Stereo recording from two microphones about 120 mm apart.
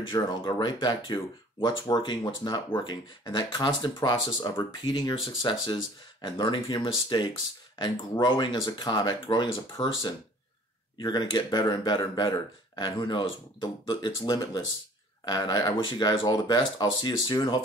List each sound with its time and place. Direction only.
0.1 s speech: 40° left (ahead or behind)